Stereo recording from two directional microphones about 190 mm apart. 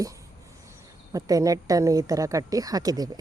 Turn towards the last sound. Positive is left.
turn(degrees=-20)  # may be behind; listen again after turning